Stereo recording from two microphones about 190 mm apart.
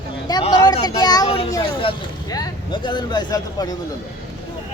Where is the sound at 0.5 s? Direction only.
20° left (ahead or behind).